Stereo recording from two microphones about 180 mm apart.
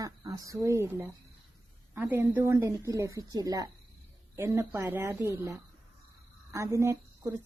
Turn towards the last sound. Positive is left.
turn(degrees=-15)  # may be behind; listen again after turning